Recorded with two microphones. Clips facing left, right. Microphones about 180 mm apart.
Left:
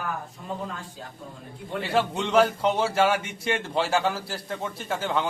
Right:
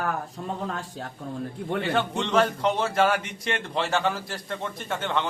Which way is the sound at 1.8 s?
5° left (ahead or behind).